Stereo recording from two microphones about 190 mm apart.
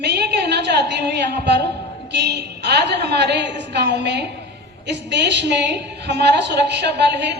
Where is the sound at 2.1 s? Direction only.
65° right (ahead or behind).